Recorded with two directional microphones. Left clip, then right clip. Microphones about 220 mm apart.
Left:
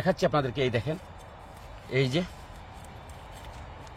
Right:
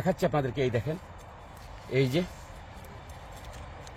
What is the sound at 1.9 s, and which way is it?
Speech, 30° right (ahead or behind).